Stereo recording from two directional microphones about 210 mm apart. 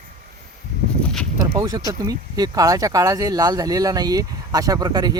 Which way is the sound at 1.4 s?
20° right (ahead or behind).